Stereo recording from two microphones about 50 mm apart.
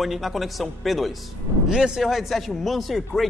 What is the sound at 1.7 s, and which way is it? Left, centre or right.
Speech, centre.